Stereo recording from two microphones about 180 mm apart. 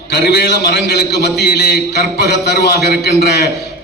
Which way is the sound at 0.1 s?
65° left (ahead or behind).